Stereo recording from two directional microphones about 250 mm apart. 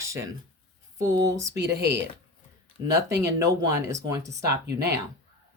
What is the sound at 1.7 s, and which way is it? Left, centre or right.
Speech, right.